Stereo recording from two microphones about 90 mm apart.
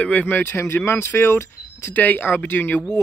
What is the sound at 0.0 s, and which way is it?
Speech, 15° left (ahead or behind).